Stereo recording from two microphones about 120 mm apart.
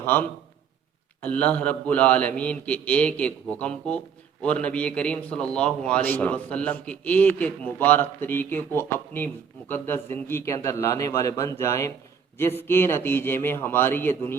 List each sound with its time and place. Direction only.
0.0 s a man's voice: 15° left (ahead or behind)